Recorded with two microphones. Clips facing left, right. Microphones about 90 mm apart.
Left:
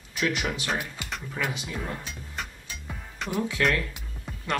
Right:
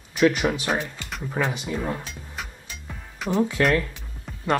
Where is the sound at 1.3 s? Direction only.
35° right (ahead or behind).